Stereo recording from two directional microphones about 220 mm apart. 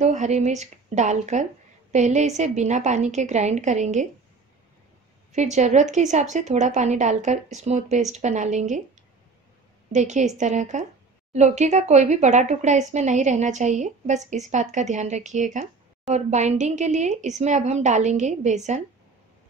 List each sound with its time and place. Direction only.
0.0 s speech: 30° right (ahead or behind)
5.3 s speech: 30° right (ahead or behind)
9.9 s speech: 30° right (ahead or behind)